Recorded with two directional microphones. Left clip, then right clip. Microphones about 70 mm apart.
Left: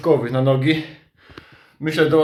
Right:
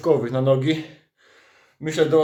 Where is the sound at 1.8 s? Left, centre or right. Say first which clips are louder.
Left 2 dB; right.